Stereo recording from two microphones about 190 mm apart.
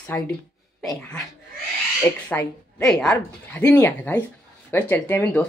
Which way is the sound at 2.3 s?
5° left (ahead or behind).